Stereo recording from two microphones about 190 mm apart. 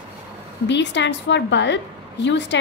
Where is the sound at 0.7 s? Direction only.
70° left (ahead or behind).